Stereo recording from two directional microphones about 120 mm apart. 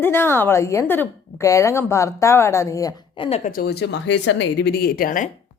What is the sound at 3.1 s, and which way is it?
Speech, 50° left (ahead or behind).